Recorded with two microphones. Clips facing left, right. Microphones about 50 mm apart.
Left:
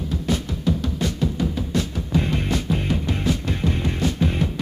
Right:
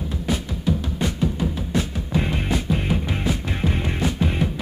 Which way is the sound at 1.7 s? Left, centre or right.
Centre.